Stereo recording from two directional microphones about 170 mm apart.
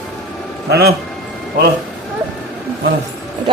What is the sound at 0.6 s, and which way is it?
Speech, 65° right (ahead or behind).